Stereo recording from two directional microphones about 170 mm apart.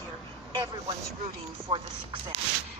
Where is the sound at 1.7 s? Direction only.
30° right (ahead or behind).